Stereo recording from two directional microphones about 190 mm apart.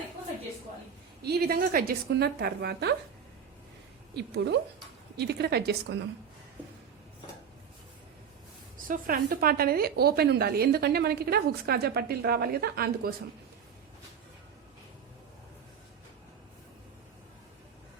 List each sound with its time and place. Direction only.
1.2 s a woman's voice: 55° right (ahead or behind)
4.1 s a woman's voice: 65° right (ahead or behind)
8.9 s a woman's voice: 50° right (ahead or behind)